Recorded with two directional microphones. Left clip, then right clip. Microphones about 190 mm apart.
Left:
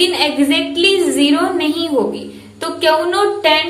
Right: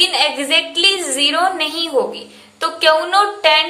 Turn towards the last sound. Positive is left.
turn(degrees=-30)  # may be behind; listen again after turning